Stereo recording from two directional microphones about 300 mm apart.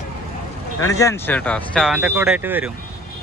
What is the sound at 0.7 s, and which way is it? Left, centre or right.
Speech, centre.